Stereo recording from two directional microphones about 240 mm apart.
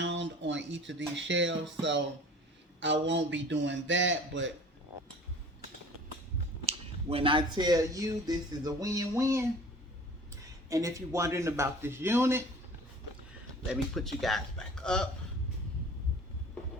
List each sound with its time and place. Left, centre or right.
0.0 s music: right
2.8 s a man's voice: right
6.7 s speech: right
10.7 s speech: centre
13.9 s speech: centre